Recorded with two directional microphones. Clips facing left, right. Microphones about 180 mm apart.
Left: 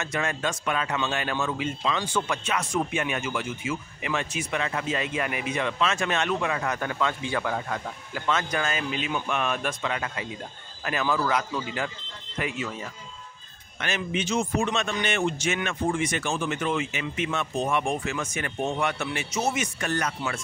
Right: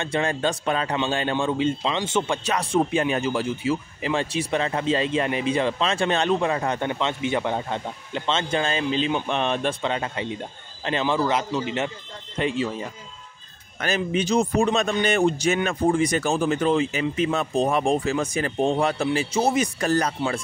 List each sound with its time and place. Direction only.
0.0 s a man's voice: 30° right (ahead or behind)